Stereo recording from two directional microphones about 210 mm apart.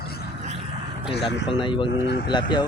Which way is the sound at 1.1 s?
55° left (ahead or behind).